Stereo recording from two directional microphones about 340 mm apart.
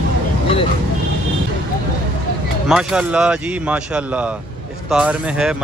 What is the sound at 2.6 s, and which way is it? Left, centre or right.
Speech, centre.